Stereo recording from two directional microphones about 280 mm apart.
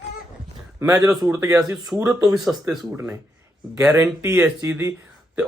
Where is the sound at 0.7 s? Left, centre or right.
Centre.